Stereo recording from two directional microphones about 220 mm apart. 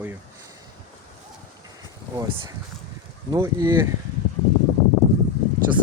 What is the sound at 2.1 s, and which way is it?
Speech, 15° right (ahead or behind).